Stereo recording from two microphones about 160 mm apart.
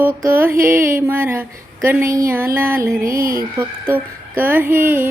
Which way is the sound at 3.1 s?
65° right (ahead or behind).